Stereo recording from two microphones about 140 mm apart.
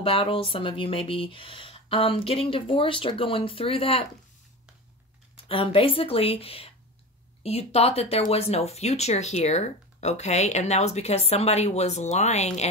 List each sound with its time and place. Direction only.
0.0 s speech: 40° left (ahead or behind)
5.3 s speech: 40° left (ahead or behind)